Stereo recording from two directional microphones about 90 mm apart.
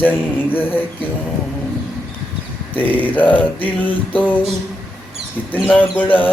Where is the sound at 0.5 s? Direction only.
20° left (ahead or behind).